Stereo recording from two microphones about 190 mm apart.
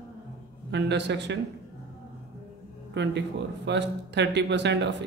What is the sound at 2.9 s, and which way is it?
Speech, 65° right (ahead or behind).